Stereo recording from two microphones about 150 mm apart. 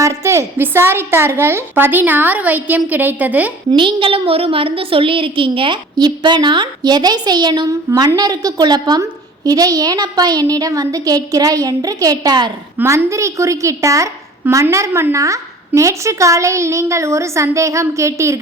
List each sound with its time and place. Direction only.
0.0 s a woman's voice: 20° right (ahead or behind)
3.7 s a woman's voice: 30° right (ahead or behind)